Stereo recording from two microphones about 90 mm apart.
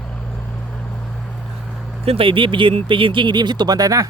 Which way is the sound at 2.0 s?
85° right.